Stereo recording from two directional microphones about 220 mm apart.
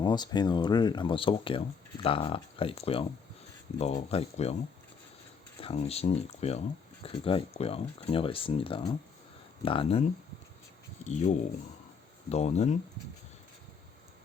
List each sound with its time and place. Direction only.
0.0 s speech: 20° left (ahead or behind)
5.5 s speech: 25° left (ahead or behind)